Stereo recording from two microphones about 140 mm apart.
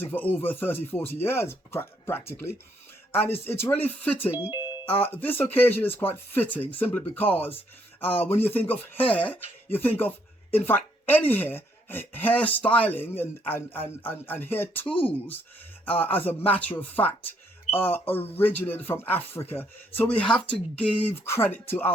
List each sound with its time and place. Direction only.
0.0 s speech: 15° left (ahead or behind)